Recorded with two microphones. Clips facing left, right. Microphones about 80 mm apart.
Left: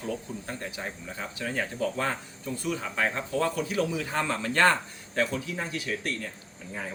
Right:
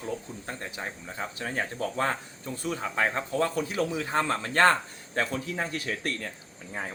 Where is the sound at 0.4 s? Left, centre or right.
Right.